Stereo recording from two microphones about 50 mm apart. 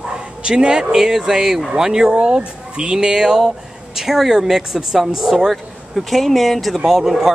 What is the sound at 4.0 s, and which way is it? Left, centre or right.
Speech, centre.